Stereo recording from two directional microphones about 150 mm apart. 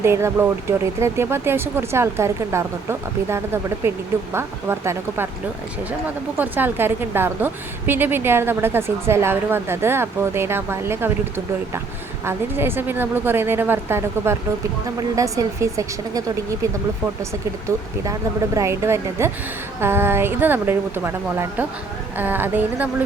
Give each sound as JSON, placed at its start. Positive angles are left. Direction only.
{"t": 0.0, "sound": "a woman's voice", "side_deg": -15}
{"t": 6.3, "sound": "a woman's voice", "side_deg": -15}
{"t": 12.2, "sound": "a woman's voice", "side_deg": -15}
{"t": 17.7, "sound": "a woman's voice", "side_deg": -20}